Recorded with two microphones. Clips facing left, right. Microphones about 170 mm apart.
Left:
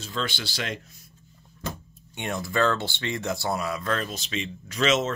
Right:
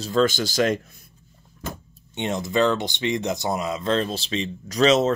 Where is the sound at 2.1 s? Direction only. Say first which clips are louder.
Right 4 dB; 20° right (ahead or behind).